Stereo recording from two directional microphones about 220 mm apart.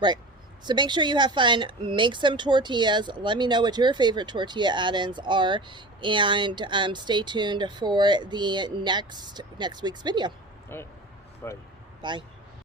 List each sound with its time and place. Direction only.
0.6 s speech: 20° right (ahead or behind)
10.7 s speech: 10° left (ahead or behind)
12.0 s speech: 20° right (ahead or behind)